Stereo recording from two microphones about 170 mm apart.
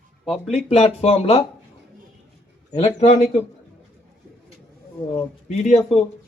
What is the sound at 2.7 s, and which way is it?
Speech, 40° left (ahead or behind).